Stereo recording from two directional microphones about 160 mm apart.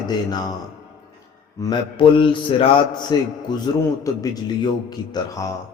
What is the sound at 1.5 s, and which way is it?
Speech, 20° left (ahead or behind).